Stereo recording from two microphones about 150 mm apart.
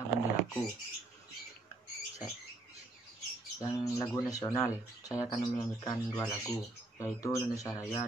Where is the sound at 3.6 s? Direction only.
25° left (ahead or behind).